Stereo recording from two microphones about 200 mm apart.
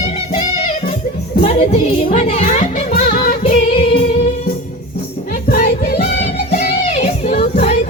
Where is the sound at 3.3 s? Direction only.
35° left (ahead or behind).